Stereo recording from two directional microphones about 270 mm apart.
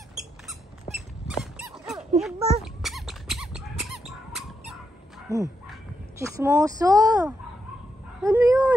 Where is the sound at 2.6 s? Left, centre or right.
Centre.